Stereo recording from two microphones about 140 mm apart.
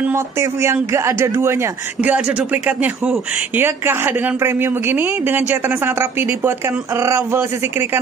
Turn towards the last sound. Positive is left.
turn(degrees=-15)  # may be behind; listen again after turning